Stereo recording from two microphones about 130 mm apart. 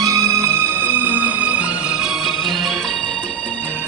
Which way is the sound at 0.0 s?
25° right (ahead or behind).